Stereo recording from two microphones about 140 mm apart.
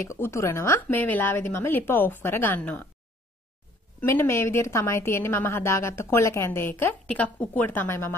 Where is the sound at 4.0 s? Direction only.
20° left (ahead or behind).